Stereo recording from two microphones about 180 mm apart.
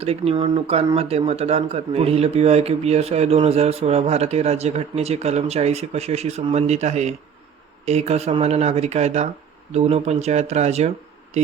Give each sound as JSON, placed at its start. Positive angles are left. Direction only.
{"t": 0.0, "sound": "speech", "side_deg": -35}